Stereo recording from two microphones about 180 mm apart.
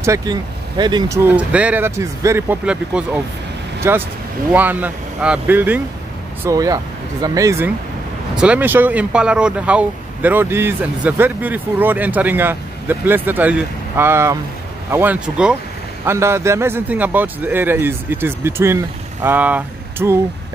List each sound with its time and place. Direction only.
0.0 s speech: 20° right (ahead or behind)